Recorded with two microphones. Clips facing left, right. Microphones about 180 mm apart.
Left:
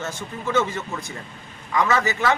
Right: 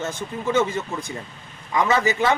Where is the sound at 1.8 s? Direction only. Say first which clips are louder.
Right 2 dB; 20° right (ahead or behind).